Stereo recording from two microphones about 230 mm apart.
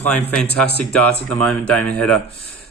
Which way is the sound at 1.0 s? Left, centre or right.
Centre.